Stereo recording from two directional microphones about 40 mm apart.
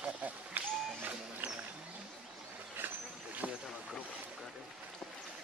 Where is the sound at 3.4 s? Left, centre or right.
Right.